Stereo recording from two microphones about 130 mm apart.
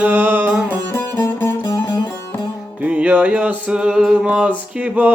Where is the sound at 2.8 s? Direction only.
10° right (ahead or behind).